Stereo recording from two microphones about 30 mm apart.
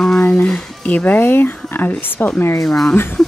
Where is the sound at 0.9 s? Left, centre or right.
Left.